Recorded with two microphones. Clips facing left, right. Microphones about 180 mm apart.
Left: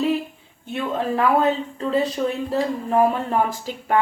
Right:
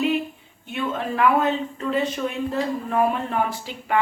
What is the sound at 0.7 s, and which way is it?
Speech, 35° left (ahead or behind).